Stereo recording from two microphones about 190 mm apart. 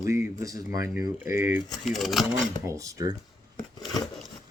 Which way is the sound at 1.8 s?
Centre (ahead or behind).